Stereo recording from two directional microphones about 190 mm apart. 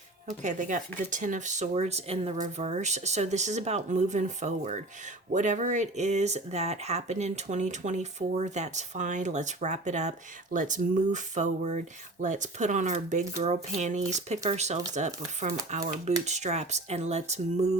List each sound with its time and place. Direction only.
0.3 s speech: 40° right (ahead or behind)